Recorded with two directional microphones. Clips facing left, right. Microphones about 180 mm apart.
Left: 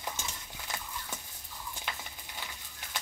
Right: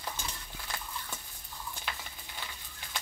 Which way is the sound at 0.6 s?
10° left (ahead or behind).